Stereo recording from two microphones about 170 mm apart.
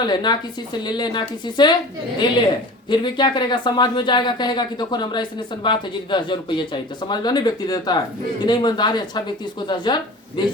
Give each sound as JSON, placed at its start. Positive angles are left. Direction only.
{"t": 0.0, "sound": "speech", "side_deg": 25}